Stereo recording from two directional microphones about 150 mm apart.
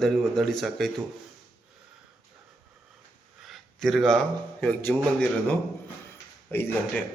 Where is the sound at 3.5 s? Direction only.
Centre (ahead or behind).